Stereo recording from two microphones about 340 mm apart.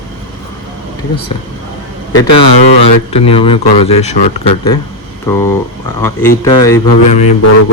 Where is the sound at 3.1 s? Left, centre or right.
Centre.